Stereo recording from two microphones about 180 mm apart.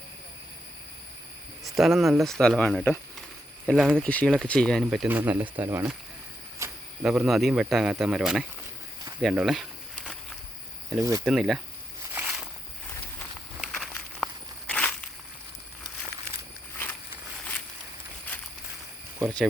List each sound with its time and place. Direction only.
1.8 s speech: centre (ahead or behind)
3.7 s speech: 5° right (ahead or behind)
4.0 s speech: 5° left (ahead or behind); by 5.9 s 15° right (ahead or behind)
6.6 s cricket: 15° right (ahead or behind)
7.0 s speech: 5° right (ahead or behind)
9.2 s insect: centre (ahead or behind)
10.8 s speech: 15° right (ahead or behind)
11.3 s speech: centre (ahead or behind)
12.1 s a sound: 5° right (ahead or behind)
13.6 s walk: 5° left (ahead or behind)